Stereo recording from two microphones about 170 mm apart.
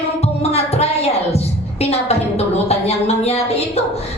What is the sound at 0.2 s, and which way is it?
Music, 35° left (ahead or behind).